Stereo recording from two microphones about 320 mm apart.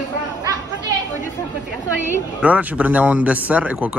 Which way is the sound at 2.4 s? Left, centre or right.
Centre.